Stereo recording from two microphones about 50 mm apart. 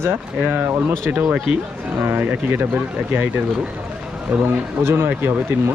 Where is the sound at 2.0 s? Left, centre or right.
Right.